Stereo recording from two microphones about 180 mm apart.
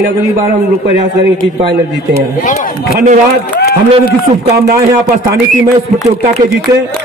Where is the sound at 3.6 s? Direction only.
65° left (ahead or behind).